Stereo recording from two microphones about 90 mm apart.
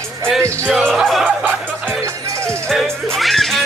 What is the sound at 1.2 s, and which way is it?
Music, 20° right (ahead or behind).